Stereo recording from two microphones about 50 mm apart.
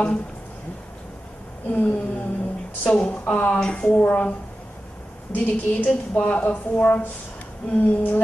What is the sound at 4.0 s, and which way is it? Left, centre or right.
Speech, left.